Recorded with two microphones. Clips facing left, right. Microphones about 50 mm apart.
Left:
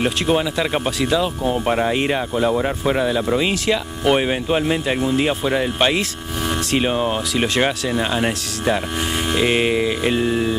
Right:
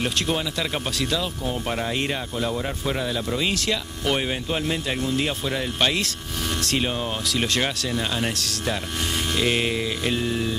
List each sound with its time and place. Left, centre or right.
0.0 s speech: centre